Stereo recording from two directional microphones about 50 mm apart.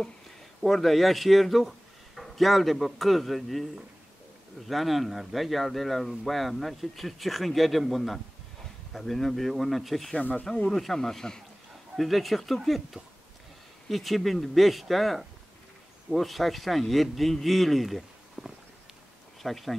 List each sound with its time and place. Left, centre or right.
0.7 s speech: centre
4.6 s speech: centre
10.1 s speech: left
10.7 s speech: centre
12.0 s speech: centre